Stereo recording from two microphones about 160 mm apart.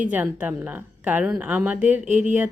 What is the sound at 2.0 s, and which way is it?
Speech, 50° right (ahead or behind).